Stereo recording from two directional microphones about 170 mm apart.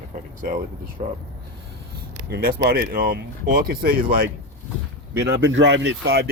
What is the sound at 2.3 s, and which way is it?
Speech, 65° right (ahead or behind).